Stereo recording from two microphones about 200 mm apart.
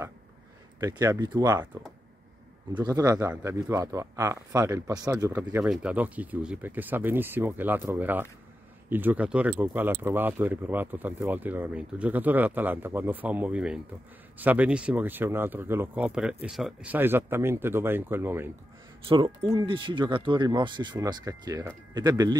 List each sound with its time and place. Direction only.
0.7 s speech: 15° right (ahead or behind)
2.7 s speech: 20° right (ahead or behind)
19.0 s speech: 25° right (ahead or behind)